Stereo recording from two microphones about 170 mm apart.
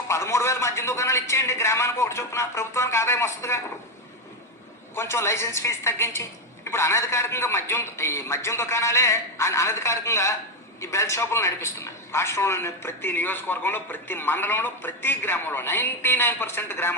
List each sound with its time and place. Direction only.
0.1 s speech: 15° left (ahead or behind)
4.9 s speech: 15° left (ahead or behind)